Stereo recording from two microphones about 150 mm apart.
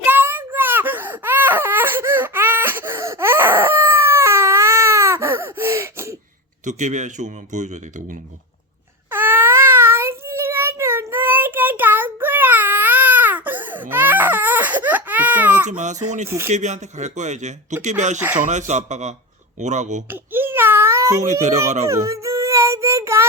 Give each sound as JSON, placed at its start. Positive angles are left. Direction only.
{"t": 0.0, "sound": "baby cry", "side_deg": -15}
{"t": 6.7, "sound": "speech", "side_deg": -55}
{"t": 9.0, "sound": "child singing", "side_deg": -15}
{"t": 13.9, "sound": "baby cry", "side_deg": -10}
{"t": 15.6, "sound": "speech", "side_deg": -55}
{"t": 16.2, "sound": "speech", "side_deg": -15}
{"t": 16.5, "sound": "speech", "side_deg": -50}
{"t": 20.1, "sound": "baby cry", "side_deg": -15}
{"t": 21.8, "sound": "a sound", "side_deg": -20}